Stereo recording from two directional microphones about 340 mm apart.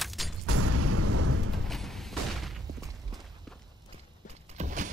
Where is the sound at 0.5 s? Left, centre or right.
Right.